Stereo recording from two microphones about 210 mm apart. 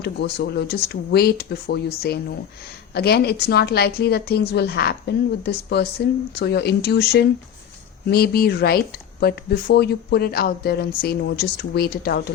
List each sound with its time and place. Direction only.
0.0 s speech: 50° left (ahead or behind)